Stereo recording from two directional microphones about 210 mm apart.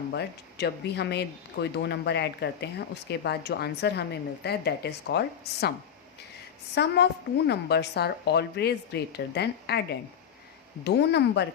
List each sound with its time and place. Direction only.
0.1 s a woman's voice: 55° left (ahead or behind)
6.7 s a woman's voice: 55° left (ahead or behind)
10.8 s speech: 55° left (ahead or behind)